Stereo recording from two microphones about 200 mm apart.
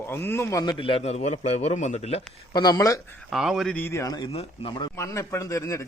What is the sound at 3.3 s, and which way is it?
A man's voice, centre (ahead or behind).